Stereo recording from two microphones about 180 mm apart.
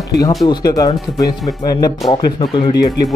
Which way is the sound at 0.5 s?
20° left (ahead or behind).